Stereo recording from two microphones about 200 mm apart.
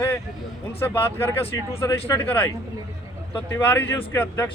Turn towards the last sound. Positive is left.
turn(degrees=10)  # may be behind; listen again after turning